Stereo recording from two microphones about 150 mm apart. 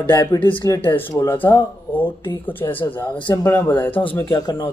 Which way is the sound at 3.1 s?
30° left (ahead or behind).